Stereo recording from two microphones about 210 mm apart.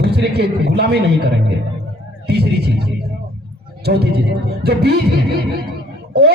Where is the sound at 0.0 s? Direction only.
50° right (ahead or behind).